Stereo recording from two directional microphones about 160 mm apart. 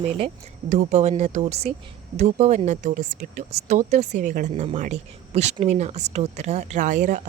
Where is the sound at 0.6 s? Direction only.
50° right (ahead or behind).